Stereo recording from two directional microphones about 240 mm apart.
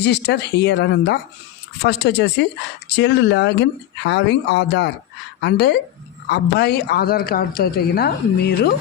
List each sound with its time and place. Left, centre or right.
0.0 s speech: left